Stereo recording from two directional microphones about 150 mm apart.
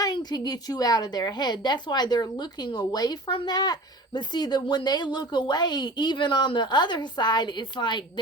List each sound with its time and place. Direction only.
0.0 s a woman's voice: 25° left (ahead or behind)